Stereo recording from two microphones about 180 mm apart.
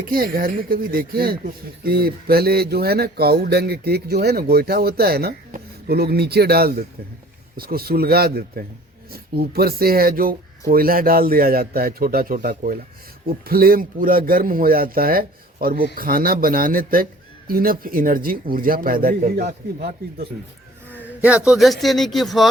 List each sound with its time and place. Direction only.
0.0 s speech: 55° right (ahead or behind)
21.2 s speech: 5° right (ahead or behind)